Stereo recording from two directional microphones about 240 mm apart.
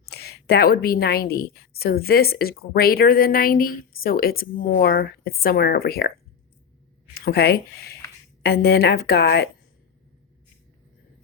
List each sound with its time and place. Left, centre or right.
0.0 s a woman's voice: left
7.1 s a woman's voice: left